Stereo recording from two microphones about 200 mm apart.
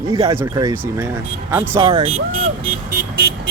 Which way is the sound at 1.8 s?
25° right (ahead or behind).